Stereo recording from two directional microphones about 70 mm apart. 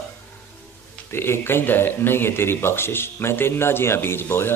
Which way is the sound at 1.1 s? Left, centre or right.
Left.